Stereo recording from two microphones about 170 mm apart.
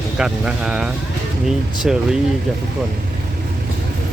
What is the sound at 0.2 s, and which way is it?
Speech, 5° right (ahead or behind).